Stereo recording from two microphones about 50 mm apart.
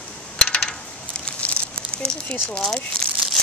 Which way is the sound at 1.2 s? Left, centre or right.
Left.